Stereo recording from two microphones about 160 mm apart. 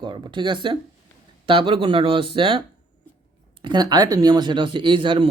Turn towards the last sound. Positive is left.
turn(degrees=-30)  # may be behind; listen again after turning